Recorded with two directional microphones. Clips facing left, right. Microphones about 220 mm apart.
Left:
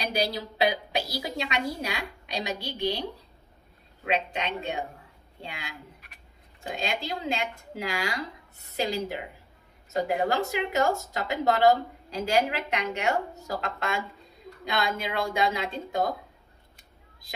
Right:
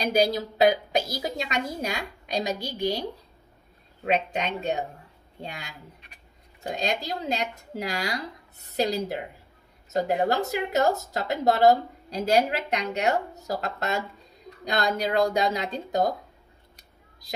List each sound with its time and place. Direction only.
0.0 s a woman's voice: 45° right (ahead or behind)